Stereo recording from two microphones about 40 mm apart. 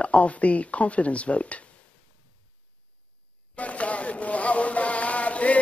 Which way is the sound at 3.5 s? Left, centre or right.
Left.